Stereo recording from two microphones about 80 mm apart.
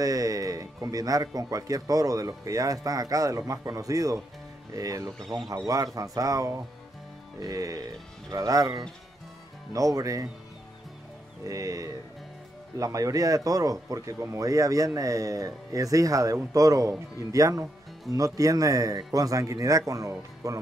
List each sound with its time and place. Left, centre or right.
0.0 s speech: right
11.4 s speech: right